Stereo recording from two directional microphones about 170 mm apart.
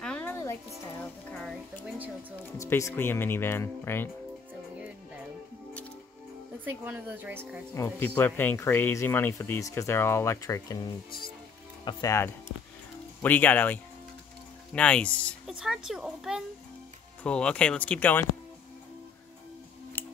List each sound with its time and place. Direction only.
0.0 s music: 5° left (ahead or behind)
2.5 s speech: 15° left (ahead or behind)
6.6 s a woman's voice: 10° right (ahead or behind)
7.7 s speech: 15° left (ahead or behind)
11.8 s a child's voice: 20° left (ahead or behind)